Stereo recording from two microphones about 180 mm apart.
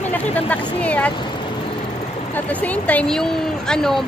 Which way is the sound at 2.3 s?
10° left (ahead or behind).